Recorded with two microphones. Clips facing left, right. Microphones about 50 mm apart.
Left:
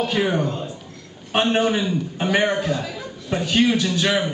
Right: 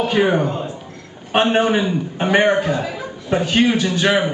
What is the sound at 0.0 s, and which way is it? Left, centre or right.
A man's voice, centre.